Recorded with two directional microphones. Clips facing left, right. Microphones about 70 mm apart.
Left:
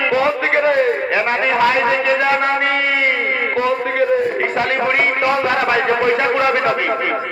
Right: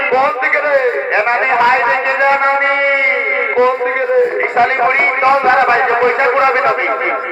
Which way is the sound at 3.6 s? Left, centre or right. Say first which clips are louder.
Right 5 dB; right.